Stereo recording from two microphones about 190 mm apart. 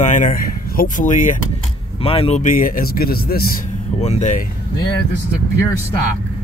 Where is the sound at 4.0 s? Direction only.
35° left (ahead or behind).